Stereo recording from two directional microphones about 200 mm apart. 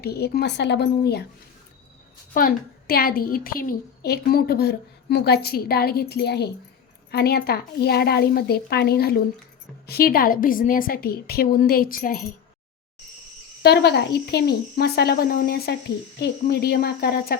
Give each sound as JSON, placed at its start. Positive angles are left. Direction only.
{"t": 0.0, "sound": "a child's voice", "side_deg": 55}
{"t": 2.3, "sound": "a child's voice", "side_deg": 45}
{"t": 13.6, "sound": "a child's voice", "side_deg": 55}